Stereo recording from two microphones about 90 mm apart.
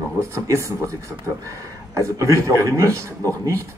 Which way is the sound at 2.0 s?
35° right (ahead or behind).